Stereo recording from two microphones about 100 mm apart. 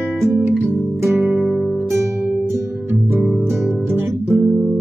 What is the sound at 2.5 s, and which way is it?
Music, 20° right (ahead or behind).